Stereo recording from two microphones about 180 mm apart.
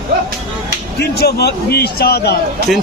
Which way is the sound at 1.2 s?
60° left (ahead or behind).